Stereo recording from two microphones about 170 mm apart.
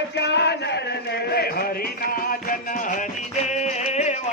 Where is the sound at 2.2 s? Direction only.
55° left (ahead or behind).